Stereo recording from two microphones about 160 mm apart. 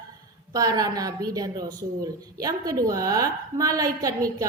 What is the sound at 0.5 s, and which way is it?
A woman's voice, 20° right (ahead or behind).